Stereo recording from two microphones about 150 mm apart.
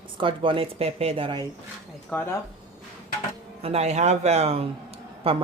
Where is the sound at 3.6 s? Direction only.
45° right (ahead or behind).